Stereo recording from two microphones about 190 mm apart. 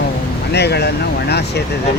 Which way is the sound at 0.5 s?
60° left (ahead or behind).